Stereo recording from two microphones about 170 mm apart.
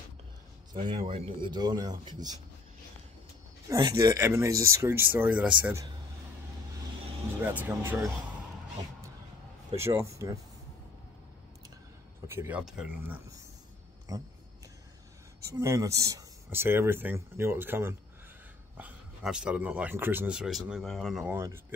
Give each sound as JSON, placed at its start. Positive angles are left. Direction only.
{"t": 0.7, "sound": "a man's voice", "side_deg": -30}
{"t": 3.6, "sound": "speech", "side_deg": -20}
{"t": 7.4, "sound": "speech", "side_deg": -10}
{"t": 9.8, "sound": "speech", "side_deg": -15}
{"t": 12.3, "sound": "speech", "side_deg": -10}
{"t": 15.5, "sound": "speech", "side_deg": -20}
{"t": 21.3, "sound": "speech", "side_deg": -15}